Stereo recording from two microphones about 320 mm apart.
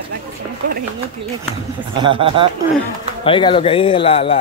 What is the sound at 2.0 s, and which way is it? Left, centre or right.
Speech, centre.